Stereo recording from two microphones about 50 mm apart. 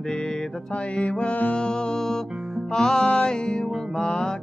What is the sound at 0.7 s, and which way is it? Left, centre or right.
Mantra, left.